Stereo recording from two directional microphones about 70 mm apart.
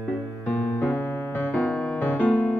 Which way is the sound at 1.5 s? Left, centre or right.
Centre.